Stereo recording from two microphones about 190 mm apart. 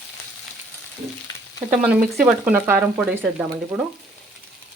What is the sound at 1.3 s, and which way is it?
Frying, 20° left (ahead or behind).